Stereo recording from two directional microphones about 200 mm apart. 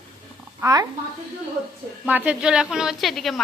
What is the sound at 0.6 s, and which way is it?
Speech, 15° right (ahead or behind).